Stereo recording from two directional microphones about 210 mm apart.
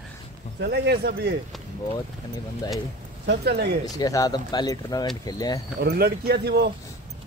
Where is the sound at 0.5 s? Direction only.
50° right (ahead or behind).